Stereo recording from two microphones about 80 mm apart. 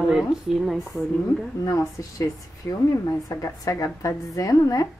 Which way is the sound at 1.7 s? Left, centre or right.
Left.